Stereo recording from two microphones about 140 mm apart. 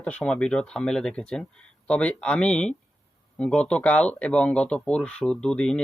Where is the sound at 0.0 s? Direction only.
10° left (ahead or behind).